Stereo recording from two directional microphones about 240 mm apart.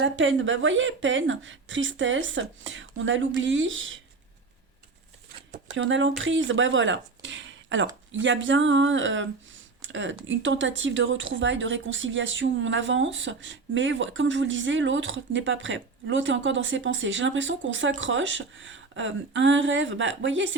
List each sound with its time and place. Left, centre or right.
0.0 s speech: right
5.7 s speech: right